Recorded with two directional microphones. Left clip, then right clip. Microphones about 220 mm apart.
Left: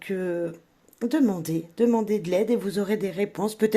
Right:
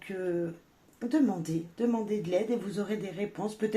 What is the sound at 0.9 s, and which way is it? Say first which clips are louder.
Speech: left 4 dB; 45° left (ahead or behind).